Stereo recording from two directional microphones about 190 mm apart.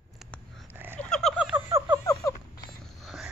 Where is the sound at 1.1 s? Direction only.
Centre (ahead or behind).